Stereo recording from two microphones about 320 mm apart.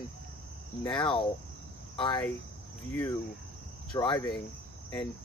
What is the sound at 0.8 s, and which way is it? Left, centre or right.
Cricket, centre.